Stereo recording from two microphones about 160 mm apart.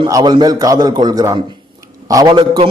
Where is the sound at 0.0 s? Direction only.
25° right (ahead or behind).